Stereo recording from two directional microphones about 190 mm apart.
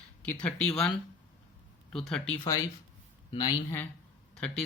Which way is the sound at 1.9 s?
5° left (ahead or behind).